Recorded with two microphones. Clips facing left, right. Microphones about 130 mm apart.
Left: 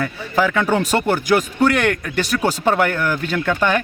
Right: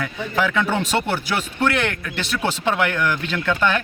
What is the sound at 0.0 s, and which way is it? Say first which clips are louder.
Speech: left 3 dB; 40° left (ahead or behind).